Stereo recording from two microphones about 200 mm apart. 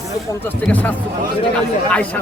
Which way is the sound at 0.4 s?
10° left (ahead or behind).